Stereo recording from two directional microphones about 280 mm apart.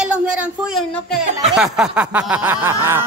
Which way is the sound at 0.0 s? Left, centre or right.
Centre.